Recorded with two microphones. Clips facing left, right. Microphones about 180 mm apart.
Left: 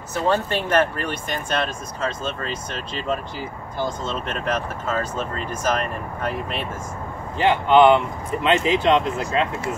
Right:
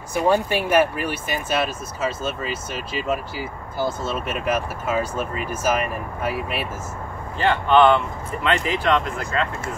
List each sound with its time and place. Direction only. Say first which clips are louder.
0.1 s speech: right 2 dB; 15° right (ahead or behind)
7.3 s speech: left 1 dB; 15° left (ahead or behind)